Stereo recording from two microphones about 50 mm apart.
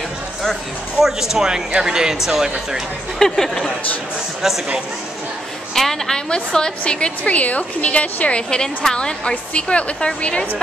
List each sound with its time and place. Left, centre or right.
0.9 s speech: centre
3.2 s speech: centre
5.8 s a woman's voice: centre